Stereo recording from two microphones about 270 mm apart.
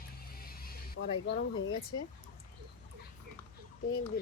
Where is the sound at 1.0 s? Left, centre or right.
Left.